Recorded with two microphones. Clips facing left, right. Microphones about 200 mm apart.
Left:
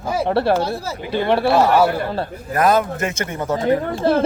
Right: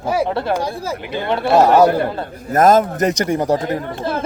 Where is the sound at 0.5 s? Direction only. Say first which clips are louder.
Even; 15° right (ahead or behind).